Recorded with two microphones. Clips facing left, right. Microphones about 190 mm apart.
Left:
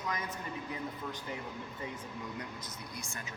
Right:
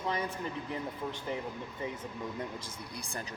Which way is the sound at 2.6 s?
35° right (ahead or behind).